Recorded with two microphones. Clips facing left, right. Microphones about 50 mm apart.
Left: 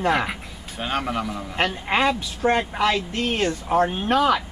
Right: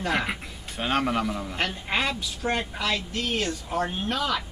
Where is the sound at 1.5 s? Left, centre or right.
Left.